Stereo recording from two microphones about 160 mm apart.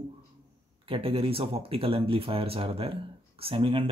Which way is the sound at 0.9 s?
35° right (ahead or behind).